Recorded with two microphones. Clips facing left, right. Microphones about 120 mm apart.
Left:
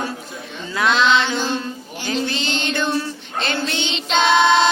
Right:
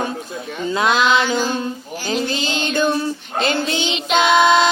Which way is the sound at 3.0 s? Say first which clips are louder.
Right 3 dB; 25° right (ahead or behind).